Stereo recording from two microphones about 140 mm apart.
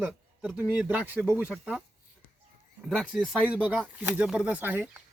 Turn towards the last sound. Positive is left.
turn(degrees=-15)  # may be behind; listen again after turning